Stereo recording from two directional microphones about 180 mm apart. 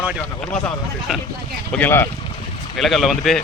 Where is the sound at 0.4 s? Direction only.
5° left (ahead or behind).